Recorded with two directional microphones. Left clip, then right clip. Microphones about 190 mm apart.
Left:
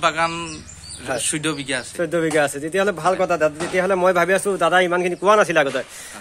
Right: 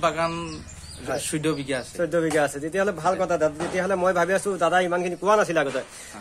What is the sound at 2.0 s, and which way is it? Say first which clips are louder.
Speech: left 3 dB; 50° left (ahead or behind).